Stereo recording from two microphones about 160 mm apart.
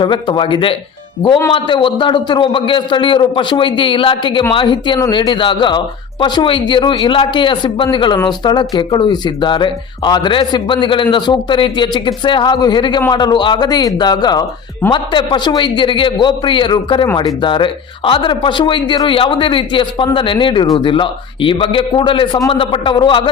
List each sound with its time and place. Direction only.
0.0 s a man's voice: 30° left (ahead or behind)